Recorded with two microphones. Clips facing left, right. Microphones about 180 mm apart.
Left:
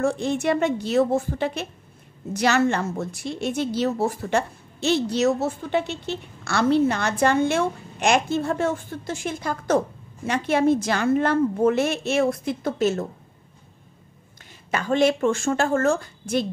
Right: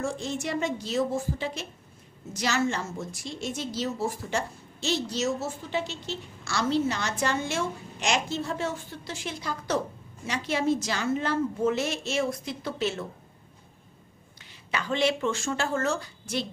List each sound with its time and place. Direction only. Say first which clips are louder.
0.0 s a woman's voice: left 8 dB; 60° left (ahead or behind)
14.7 s a woman's voice: left 6 dB; 50° left (ahead or behind)